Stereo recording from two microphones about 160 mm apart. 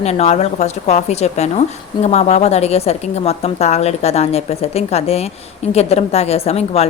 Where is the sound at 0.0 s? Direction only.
40° left (ahead or behind).